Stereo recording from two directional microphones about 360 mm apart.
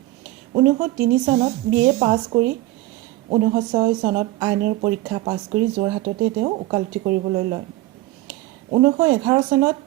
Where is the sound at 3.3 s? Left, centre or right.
Centre.